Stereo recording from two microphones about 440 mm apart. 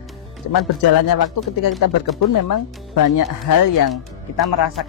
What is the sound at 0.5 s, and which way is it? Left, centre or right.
Speech, left.